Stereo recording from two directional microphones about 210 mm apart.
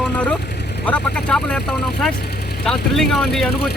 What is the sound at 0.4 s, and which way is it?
Vehicle, 55° left (ahead or behind).